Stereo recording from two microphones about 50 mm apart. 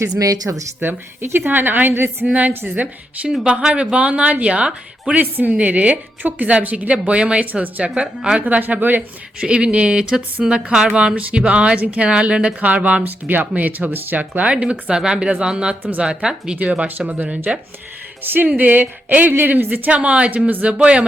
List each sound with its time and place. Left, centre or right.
0.5 s speech: right
0.8 s a woman's voice: right
2.7 s a woman's voice: right
3.4 s a woman's voice: centre
5.1 s speech: right
5.5 s a woman's voice: right
7.9 s speech: centre
8.4 s speech: right
9.0 s a woman's voice: centre
11.1 s speech: right
11.3 s a woman's voice: right
14.5 s a woman's voice: right
18.2 s speech: right
19.9 s a woman's voice: right